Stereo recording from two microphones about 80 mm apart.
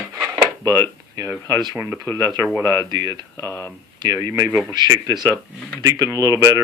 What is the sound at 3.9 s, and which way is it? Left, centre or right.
Speech, right.